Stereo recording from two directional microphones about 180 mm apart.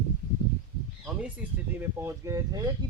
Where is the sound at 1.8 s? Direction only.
15° right (ahead or behind).